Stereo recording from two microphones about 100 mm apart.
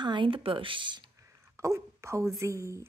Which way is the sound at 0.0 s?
55° right (ahead or behind).